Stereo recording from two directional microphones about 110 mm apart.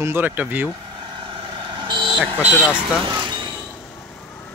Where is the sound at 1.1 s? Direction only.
50° right (ahead or behind).